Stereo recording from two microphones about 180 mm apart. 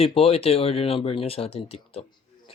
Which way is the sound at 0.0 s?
30° left (ahead or behind).